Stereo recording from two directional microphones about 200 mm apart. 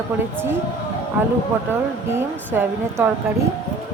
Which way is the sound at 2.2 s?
10° right (ahead or behind).